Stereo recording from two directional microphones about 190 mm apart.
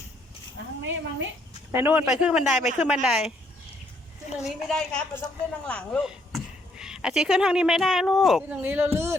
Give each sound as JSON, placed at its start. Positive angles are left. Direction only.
{"t": 0.8, "sound": "a woman's voice", "side_deg": -80}
{"t": 1.7, "sound": "a woman's voice", "side_deg": -10}
{"t": 4.4, "sound": "a woman's voice", "side_deg": 5}